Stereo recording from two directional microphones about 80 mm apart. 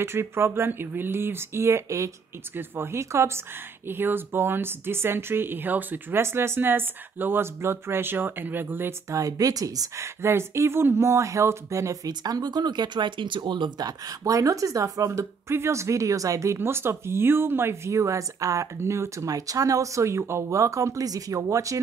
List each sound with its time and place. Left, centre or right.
0.0 s speech: right
9.1 s speech: right
10.2 s speech: right
16.5 s speech: right